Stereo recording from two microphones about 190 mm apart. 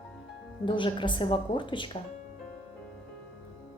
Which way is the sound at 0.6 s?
25° left (ahead or behind).